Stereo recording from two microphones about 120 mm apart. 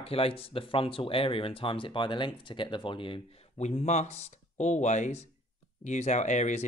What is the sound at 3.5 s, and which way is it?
Speech, 70° left (ahead or behind).